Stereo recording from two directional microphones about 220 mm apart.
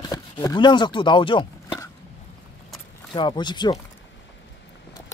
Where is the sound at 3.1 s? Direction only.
20° left (ahead or behind).